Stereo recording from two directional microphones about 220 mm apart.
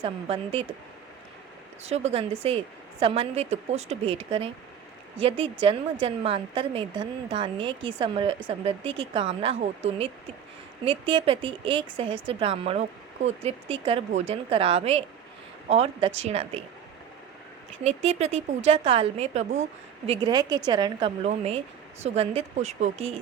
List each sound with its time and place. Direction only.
0.0 s a woman's voice: 25° right (ahead or behind)
1.8 s a woman's voice: 30° right (ahead or behind)
17.8 s a woman's voice: 30° right (ahead or behind)
20.1 s a woman's voice: 20° right (ahead or behind)